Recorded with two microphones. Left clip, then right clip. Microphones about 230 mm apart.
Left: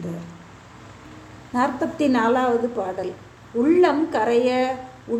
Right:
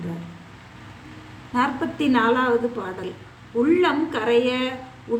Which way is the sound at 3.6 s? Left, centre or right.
Centre.